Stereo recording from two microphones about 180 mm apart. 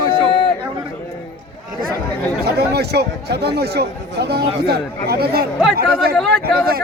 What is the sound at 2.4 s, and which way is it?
Speech, 65° right (ahead or behind).